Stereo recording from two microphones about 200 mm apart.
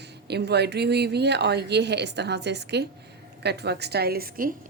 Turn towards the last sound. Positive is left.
turn(degrees=-45)  # may be behind; listen again after turning